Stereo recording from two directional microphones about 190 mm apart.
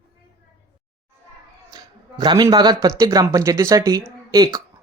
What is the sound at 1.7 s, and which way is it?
Speech, 20° right (ahead or behind).